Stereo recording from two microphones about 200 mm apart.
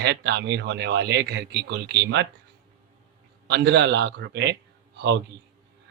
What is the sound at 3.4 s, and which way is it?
A man's voice, 55° right (ahead or behind).